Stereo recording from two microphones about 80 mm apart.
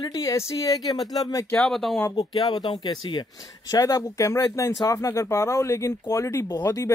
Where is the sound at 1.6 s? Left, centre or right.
Centre.